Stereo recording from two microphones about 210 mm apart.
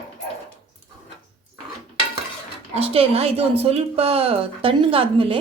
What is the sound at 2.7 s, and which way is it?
Speech, 30° right (ahead or behind).